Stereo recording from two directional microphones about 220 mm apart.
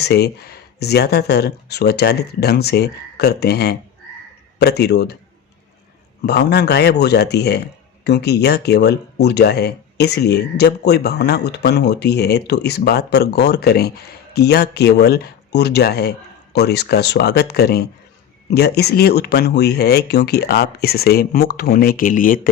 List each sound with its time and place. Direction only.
0.0 s speech: 50° left (ahead or behind)
6.2 s speech: 50° left (ahead or behind)